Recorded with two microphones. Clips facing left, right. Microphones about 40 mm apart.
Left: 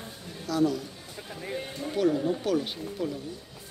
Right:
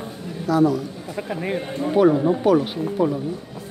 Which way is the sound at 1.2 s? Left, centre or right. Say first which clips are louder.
Right 10 dB; right.